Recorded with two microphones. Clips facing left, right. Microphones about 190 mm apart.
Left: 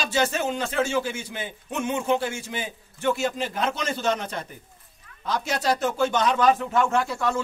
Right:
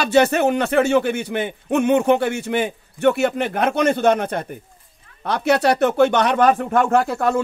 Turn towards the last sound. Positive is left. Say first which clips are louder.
# right 7 dB
turn(degrees=-60)  # may be behind; listen again after turning